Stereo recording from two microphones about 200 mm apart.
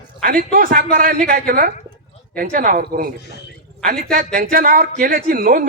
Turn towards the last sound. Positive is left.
turn(degrees=-45)  # may be behind; listen again after turning